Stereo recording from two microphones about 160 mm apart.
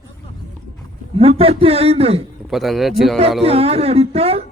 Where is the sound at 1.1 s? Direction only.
35° right (ahead or behind).